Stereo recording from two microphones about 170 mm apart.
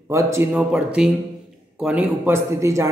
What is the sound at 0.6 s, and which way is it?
Speech, 5° right (ahead or behind).